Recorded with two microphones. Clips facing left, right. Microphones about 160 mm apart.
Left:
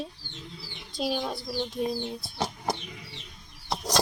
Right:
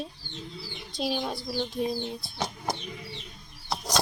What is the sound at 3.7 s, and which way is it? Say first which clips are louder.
Bird: left 2 dB; 20° left (ahead or behind).